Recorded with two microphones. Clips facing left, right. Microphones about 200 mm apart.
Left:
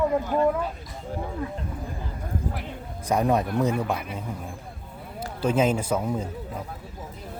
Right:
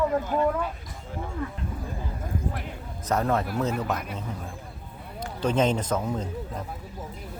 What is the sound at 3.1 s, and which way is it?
Speech, 15° left (ahead or behind).